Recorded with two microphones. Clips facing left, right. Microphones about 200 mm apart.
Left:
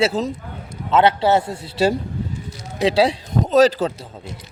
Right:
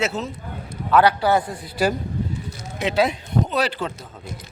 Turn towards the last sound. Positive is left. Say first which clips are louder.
# left 9 dB
turn(degrees=40)  # may be behind; listen again after turning